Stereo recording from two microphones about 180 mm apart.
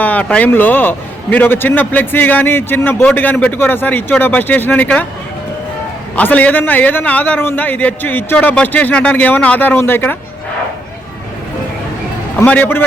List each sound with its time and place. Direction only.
0.0 s a man's voice: 10° left (ahead or behind)
6.1 s a man's voice: 10° left (ahead or behind)
12.4 s a man's voice: 10° left (ahead or behind)